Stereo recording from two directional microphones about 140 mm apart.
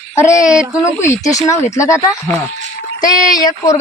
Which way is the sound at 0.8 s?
20° left (ahead or behind).